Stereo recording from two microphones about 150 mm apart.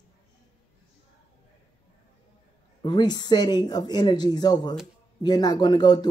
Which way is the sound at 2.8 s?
30° left (ahead or behind).